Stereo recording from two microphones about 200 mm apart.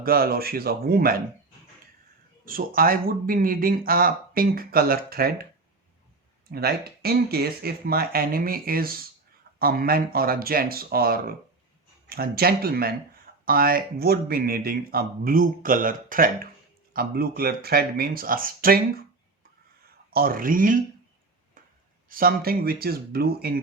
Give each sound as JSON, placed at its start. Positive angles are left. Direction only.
{"t": 0.0, "sound": "speech", "side_deg": -50}
{"t": 2.4, "sound": "speech", "side_deg": -45}
{"t": 6.5, "sound": "speech", "side_deg": -50}
{"t": 20.1, "sound": "speech", "side_deg": -45}
{"t": 22.1, "sound": "speech", "side_deg": -45}